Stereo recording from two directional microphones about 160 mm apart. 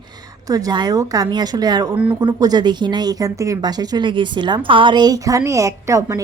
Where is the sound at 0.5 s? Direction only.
25° right (ahead or behind).